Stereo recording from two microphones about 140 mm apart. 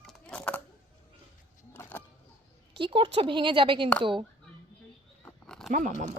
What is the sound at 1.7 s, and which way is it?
Keys jangling, 15° left (ahead or behind).